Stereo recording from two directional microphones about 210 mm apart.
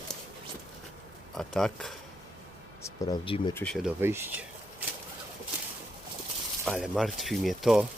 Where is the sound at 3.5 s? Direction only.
5° left (ahead or behind).